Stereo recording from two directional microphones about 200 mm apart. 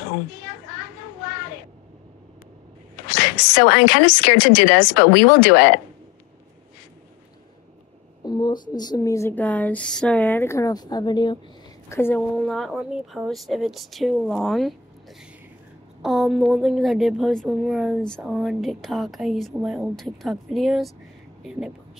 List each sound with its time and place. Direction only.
3.2 s speech: 50° left (ahead or behind)
8.3 s a sound: 20° left (ahead or behind)
11.9 s a woman's voice: 10° left (ahead or behind)